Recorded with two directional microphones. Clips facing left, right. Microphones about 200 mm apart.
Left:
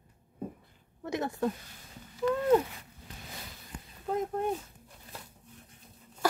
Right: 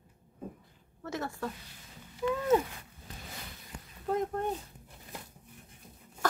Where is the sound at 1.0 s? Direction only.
15° left (ahead or behind).